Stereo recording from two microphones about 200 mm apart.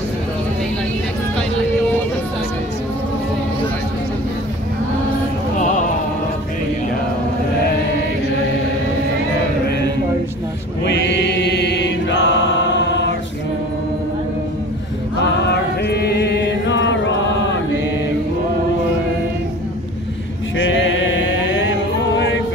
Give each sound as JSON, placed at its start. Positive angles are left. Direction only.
{"t": 10.9, "sound": "chant", "side_deg": 60}
{"t": 15.4, "sound": "chant", "side_deg": 55}
{"t": 20.5, "sound": "chant", "side_deg": 70}
{"t": 22.1, "sound": "music", "side_deg": 65}